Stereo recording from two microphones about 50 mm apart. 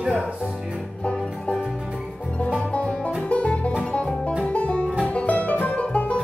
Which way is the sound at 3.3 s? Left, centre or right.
Left.